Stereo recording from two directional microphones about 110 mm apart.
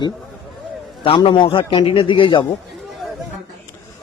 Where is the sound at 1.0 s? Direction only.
55° left (ahead or behind).